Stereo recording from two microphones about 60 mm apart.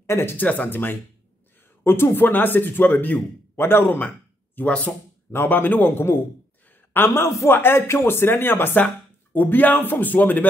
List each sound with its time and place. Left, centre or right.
0.0 s speech: left
0.4 s speech: left
4.6 s speech: left
5.3 s a man's voice: left